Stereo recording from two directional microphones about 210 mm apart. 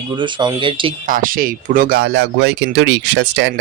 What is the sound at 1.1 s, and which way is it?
Speech, 40° right (ahead or behind).